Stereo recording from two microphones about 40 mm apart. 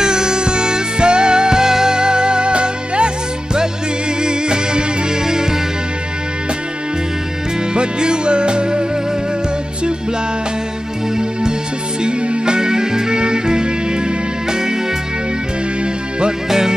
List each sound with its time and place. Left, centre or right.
0.0 s music: centre
4.2 s music: right
7.7 s music: right
12.0 s music: right
16.4 s music: centre